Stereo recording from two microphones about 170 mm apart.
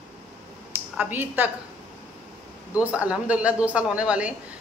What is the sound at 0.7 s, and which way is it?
Speech, 10° right (ahead or behind).